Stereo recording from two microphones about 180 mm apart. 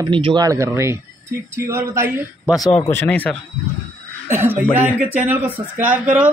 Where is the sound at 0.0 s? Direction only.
25° right (ahead or behind).